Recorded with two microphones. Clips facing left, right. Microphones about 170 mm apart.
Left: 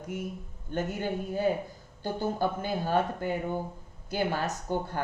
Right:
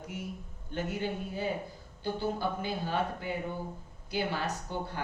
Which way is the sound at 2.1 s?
45° left (ahead or behind).